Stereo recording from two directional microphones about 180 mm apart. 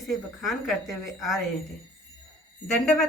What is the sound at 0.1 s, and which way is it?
A woman's voice, centre (ahead or behind).